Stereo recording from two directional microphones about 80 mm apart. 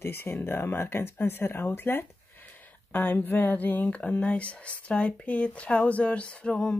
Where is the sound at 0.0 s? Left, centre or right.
Left.